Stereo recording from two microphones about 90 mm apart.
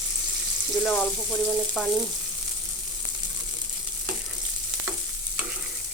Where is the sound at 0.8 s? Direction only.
20° left (ahead or behind).